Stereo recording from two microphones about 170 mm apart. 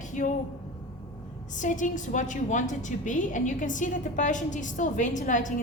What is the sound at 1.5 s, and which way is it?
A woman's voice, 50° left (ahead or behind).